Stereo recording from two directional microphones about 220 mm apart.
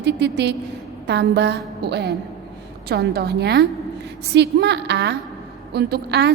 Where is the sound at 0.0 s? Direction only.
50° right (ahead or behind).